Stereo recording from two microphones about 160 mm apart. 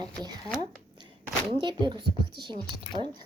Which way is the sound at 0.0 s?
25° right (ahead or behind).